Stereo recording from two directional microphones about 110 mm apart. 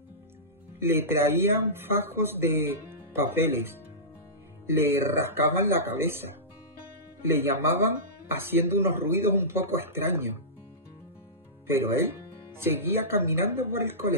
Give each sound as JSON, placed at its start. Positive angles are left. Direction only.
{"t": 0.7, "sound": "speech", "side_deg": -20}
{"t": 7.2, "sound": "speech", "side_deg": -20}
{"t": 11.6, "sound": "speech", "side_deg": -20}